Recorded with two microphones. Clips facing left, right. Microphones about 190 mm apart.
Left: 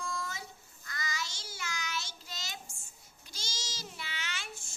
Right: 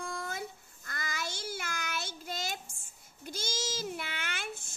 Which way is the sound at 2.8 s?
55° right (ahead or behind).